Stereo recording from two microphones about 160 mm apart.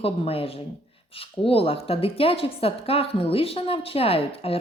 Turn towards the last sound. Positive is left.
turn(degrees=35)  # may be behind; listen again after turning